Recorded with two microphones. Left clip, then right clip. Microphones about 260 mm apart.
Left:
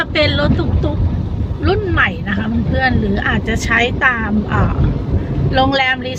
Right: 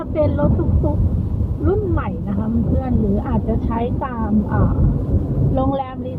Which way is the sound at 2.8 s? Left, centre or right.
Left.